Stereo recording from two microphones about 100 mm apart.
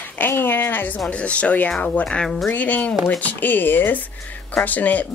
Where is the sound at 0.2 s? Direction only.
20° left (ahead or behind).